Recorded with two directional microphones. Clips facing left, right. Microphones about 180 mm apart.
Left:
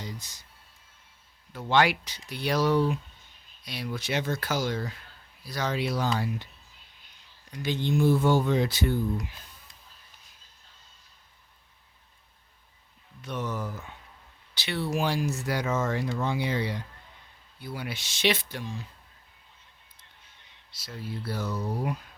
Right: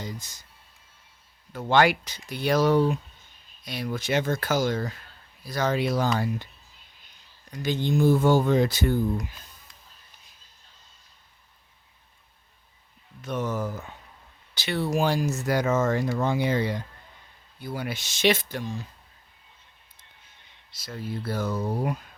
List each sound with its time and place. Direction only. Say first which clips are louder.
0.0 s speech: right 3 dB; 45° right (ahead or behind)
1.5 s speech: right 3 dB; 50° right (ahead or behind)
7.5 s speech: right 2 dB; 45° right (ahead or behind)
13.2 s speech: right 4 dB; 45° right (ahead or behind)
20.7 s speech: right 4 dB; 50° right (ahead or behind)